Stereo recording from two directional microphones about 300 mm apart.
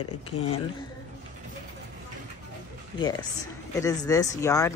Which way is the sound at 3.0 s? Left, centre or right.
Centre.